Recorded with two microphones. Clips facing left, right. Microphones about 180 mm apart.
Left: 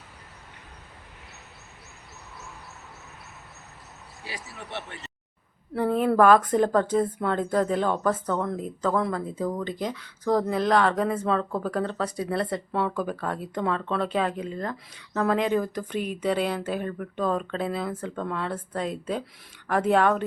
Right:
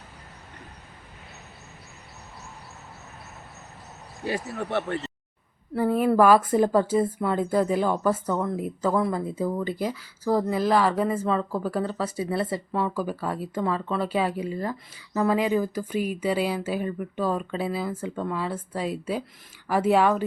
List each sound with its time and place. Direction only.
4.2 s speech: 55° right (ahead or behind)
5.7 s a woman's voice: 5° right (ahead or behind)